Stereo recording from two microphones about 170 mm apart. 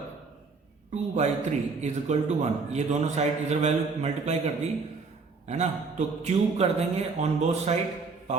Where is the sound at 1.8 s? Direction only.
45° right (ahead or behind).